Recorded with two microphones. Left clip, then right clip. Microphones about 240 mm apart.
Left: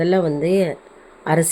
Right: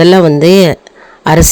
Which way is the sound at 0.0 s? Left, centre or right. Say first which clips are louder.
Right 13 dB; right.